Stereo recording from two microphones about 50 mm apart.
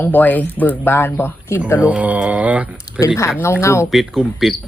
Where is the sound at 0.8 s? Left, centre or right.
Left.